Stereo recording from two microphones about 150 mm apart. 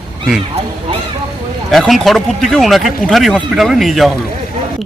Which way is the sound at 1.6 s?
Centre (ahead or behind).